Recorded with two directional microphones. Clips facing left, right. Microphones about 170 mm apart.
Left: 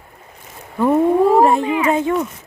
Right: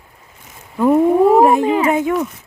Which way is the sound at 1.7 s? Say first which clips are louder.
Right 2 dB; 30° right (ahead or behind).